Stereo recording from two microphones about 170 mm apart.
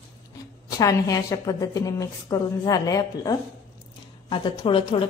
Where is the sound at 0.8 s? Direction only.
20° left (ahead or behind).